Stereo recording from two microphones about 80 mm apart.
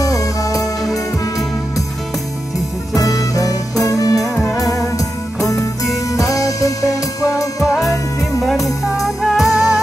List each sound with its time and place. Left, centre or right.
0.0 s music: left
3.0 s music: left
4.2 s music: centre
4.9 s music: left
7.6 s music: centre